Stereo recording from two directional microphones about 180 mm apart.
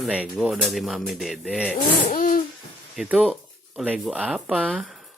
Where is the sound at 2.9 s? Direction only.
5° right (ahead or behind).